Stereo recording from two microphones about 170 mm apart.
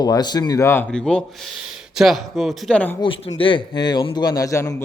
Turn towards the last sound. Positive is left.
turn(degrees=20)  # may be behind; listen again after turning